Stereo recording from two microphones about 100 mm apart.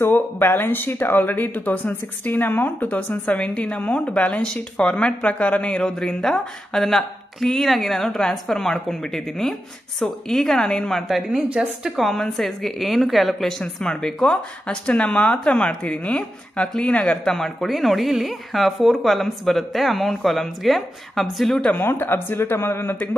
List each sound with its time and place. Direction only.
0.0 s a woman's voice: 20° left (ahead or behind); by 11.9 s 10° right (ahead or behind)
12.0 s a woman's voice: 5° left (ahead or behind)
21.7 s speech: 20° left (ahead or behind)